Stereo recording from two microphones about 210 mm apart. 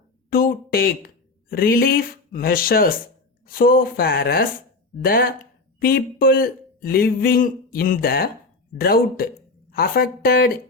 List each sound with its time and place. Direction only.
0.3 s speech: 45° left (ahead or behind)